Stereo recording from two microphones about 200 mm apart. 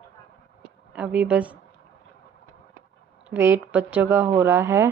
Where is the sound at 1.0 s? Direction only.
5° right (ahead or behind).